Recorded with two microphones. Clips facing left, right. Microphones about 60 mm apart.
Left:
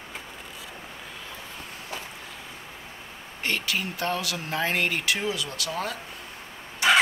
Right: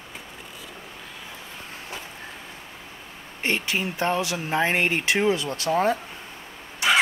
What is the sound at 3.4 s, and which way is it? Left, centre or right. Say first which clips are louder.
Speech: right 3 dB; right.